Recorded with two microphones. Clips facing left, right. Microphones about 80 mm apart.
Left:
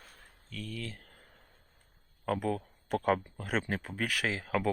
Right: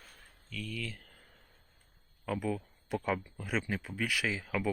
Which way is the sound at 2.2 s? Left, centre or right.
Left.